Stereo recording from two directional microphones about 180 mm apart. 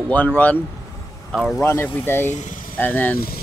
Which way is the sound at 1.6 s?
15° left (ahead or behind).